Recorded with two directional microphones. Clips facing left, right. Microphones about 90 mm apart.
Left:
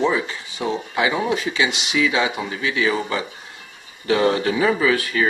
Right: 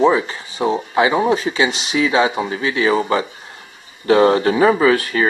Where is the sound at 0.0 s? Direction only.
40° right (ahead or behind).